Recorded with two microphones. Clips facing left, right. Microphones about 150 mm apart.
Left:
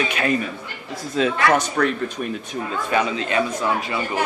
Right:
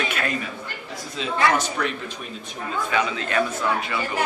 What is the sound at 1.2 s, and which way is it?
Speech, 50° left (ahead or behind).